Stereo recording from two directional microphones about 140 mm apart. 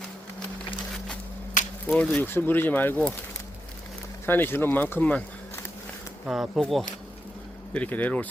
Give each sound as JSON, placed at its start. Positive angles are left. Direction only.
{"t": 1.6, "sound": "a sound", "side_deg": 65}
{"t": 1.9, "sound": "speech", "side_deg": 0}
{"t": 2.2, "sound": "speech", "side_deg": 15}
{"t": 4.3, "sound": "speech", "side_deg": 15}
{"t": 6.2, "sound": "speech", "side_deg": 0}
{"t": 7.7, "sound": "speech", "side_deg": 10}